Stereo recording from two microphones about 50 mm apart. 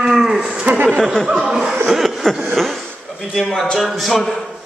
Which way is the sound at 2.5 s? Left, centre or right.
Centre.